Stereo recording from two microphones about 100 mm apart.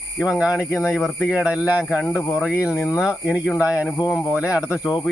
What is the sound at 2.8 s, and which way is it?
Speech, 30° left (ahead or behind).